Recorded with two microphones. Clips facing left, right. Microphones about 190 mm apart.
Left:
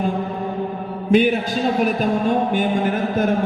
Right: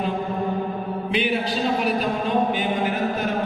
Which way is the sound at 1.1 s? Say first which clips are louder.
Left 8 dB; 45° left (ahead or behind).